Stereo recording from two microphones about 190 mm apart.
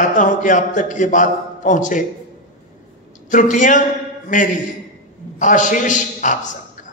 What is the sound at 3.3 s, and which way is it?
A man's voice, 40° left (ahead or behind).